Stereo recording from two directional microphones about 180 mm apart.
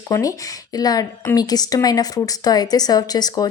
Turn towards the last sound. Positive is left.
turn(degrees=20)  # may be behind; listen again after turning